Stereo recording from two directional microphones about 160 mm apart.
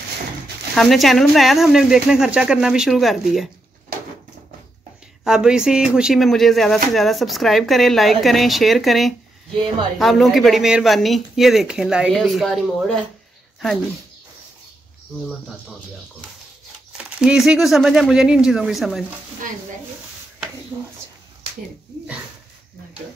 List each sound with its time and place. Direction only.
0.7 s speech: centre (ahead or behind)
5.2 s speech: 5° right (ahead or behind)
16.9 s speech: 5° right (ahead or behind)
20.7 s speech: 15° right (ahead or behind)